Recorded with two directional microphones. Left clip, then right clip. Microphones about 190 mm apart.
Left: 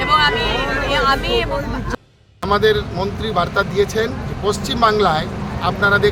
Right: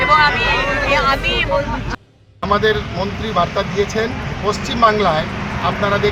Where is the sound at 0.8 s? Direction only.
30° left (ahead or behind).